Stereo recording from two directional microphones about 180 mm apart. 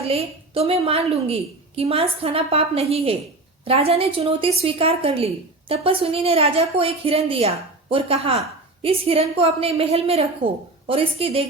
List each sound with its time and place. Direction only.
0.1 s a woman's voice: 35° right (ahead or behind)